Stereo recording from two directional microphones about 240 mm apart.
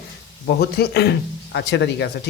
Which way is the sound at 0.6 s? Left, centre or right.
Left.